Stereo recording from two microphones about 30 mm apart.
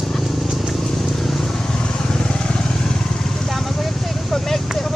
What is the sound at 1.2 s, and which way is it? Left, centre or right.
Vehicle, centre.